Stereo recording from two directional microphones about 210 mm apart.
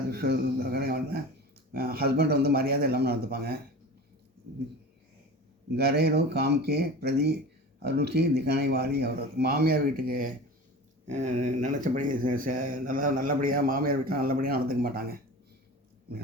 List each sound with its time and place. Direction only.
0.1 s speech: 45° right (ahead or behind)
5.7 s speech: 50° right (ahead or behind)